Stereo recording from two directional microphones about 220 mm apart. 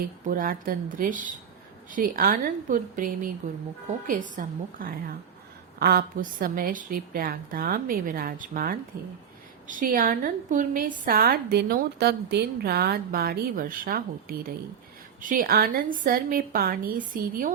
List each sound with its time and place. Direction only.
0.3 s a woman's voice: 40° right (ahead or behind)